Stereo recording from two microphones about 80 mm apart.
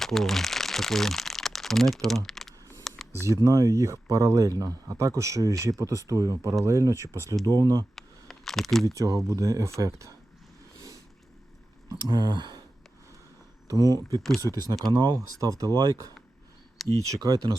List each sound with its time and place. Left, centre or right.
0.0 s speech: centre
2.9 s a sound: centre
3.2 s speech: right
7.9 s camera: centre
8.9 s speech: right
11.9 s speech: right
13.7 s speech: right
14.2 s speech: centre
14.4 s speech: right
16.8 s a sound: centre
17.2 s speech: right